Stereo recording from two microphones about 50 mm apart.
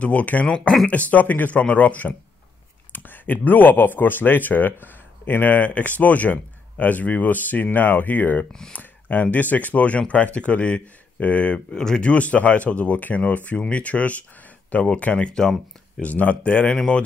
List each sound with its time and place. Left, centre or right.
0.0 s speech: left
0.6 s speech: centre
0.8 s speech: left
8.5 s speech: centre
8.7 s speech: left
11.7 s speech: centre
12.1 s speech: left
16.0 s speech: left